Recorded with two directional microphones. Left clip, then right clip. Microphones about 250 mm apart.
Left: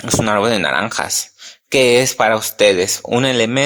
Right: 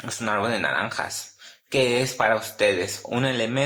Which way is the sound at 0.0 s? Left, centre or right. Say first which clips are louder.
Left 10 dB; left.